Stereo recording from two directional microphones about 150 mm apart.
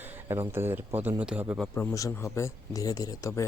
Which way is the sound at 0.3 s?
15° right (ahead or behind).